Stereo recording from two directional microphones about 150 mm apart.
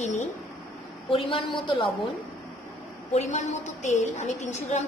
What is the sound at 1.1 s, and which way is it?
Speech, 35° left (ahead or behind).